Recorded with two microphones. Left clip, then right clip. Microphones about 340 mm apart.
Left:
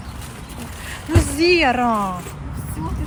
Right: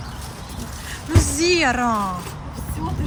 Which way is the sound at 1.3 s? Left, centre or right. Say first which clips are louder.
Left 3 dB; right.